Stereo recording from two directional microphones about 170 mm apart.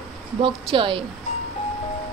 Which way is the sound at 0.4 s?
35° right (ahead or behind).